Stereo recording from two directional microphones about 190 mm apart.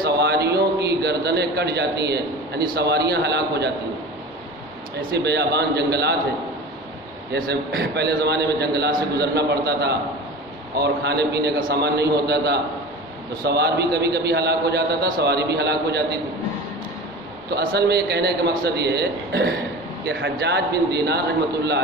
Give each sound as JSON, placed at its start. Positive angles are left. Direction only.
{"t": 0.0, "sound": "a sound", "side_deg": -60}
{"t": 2.7, "sound": "a man's voice", "side_deg": -60}
{"t": 5.1, "sound": "a man's voice", "side_deg": -60}
{"t": 7.3, "sound": "a man's voice", "side_deg": -55}
{"t": 17.7, "sound": "a man's voice", "side_deg": -60}